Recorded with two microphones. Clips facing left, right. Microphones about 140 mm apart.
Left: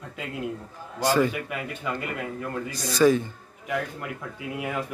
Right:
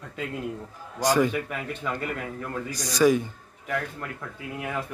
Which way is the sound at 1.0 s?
15° right (ahead or behind).